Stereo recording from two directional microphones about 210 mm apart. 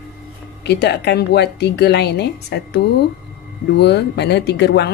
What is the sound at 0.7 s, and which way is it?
Speech, 50° left (ahead or behind).